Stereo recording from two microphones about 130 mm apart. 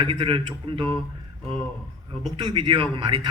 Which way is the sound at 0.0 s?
40° right (ahead or behind).